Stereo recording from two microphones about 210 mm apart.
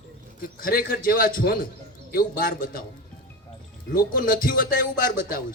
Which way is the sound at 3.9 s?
40° left (ahead or behind).